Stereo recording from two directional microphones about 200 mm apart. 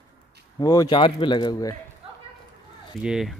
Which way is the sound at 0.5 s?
20° left (ahead or behind).